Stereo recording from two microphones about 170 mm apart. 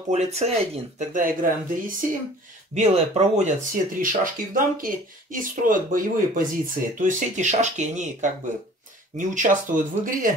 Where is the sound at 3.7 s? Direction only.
55° right (ahead or behind).